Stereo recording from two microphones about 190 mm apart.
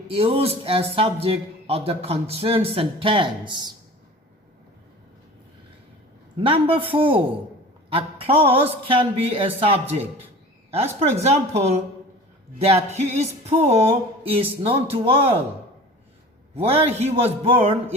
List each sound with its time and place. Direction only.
0.1 s a man's voice: 30° right (ahead or behind)
6.3 s a man's voice: 25° right (ahead or behind)
11.2 s a man's voice: 35° right (ahead or behind)
16.6 s a man's voice: 30° right (ahead or behind)